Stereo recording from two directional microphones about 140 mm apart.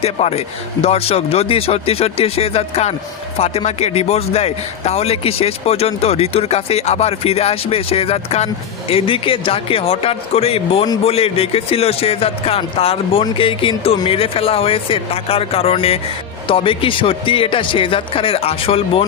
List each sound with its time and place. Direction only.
0.0 s a man's voice: 50° left (ahead or behind)